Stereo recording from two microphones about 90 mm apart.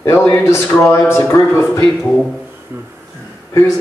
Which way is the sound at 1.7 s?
5° left (ahead or behind).